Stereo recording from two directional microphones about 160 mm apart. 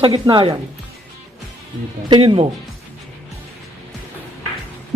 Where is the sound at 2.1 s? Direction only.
30° right (ahead or behind).